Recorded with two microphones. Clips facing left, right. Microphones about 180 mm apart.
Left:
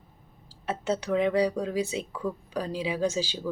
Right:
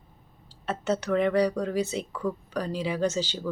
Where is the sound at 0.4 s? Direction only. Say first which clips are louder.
Right 1 dB; 10° left (ahead or behind).